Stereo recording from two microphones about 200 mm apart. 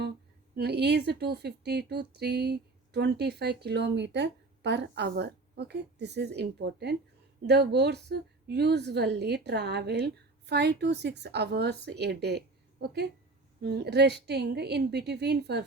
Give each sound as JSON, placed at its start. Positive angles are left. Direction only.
{"t": 0.5, "sound": "speech", "side_deg": -55}